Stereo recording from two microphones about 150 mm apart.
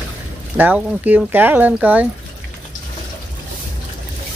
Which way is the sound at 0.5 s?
10° right (ahead or behind).